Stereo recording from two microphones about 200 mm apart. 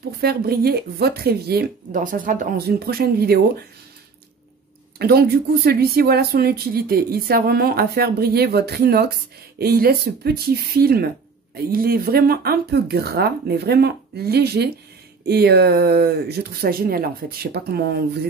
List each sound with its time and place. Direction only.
0.2 s speech: 50° right (ahead or behind)
4.9 s speech: 50° right (ahead or behind)